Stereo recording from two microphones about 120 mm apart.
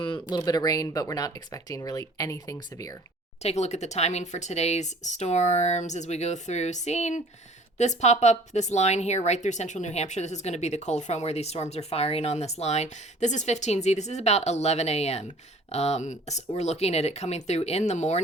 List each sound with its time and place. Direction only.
0.0 s speech: 40° left (ahead or behind)
3.4 s speech: 70° left (ahead or behind)